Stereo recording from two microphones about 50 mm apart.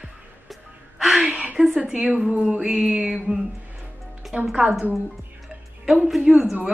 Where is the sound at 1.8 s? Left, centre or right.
Right.